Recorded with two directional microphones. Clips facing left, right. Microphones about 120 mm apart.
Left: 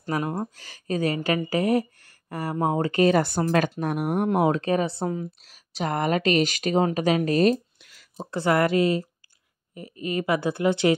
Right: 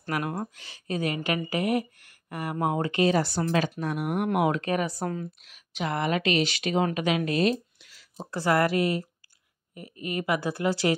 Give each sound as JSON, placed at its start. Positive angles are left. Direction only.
{"t": 0.1, "sound": "speech", "side_deg": 20}
{"t": 0.6, "sound": "speech", "side_deg": 40}
{"t": 3.0, "sound": "speech", "side_deg": 55}
{"t": 3.8, "sound": "speech", "side_deg": 45}
{"t": 5.0, "sound": "a woman's voice", "side_deg": 15}
{"t": 5.4, "sound": "a woman's voice", "side_deg": 35}
{"t": 8.2, "sound": "speech", "side_deg": 25}